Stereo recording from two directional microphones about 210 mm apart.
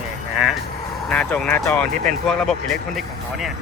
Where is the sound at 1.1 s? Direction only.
5° left (ahead or behind).